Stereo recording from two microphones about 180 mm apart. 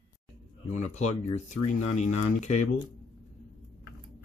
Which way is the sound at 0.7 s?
40° left (ahead or behind).